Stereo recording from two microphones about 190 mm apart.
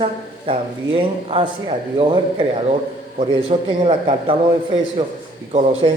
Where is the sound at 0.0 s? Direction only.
30° right (ahead or behind).